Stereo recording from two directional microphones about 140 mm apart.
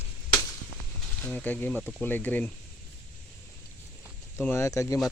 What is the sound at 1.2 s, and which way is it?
Speech, 10° left (ahead or behind).